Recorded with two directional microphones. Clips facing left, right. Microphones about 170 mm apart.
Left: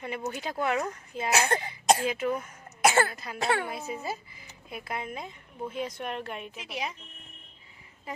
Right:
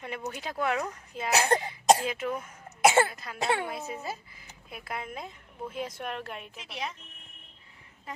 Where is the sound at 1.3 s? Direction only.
35° right (ahead or behind).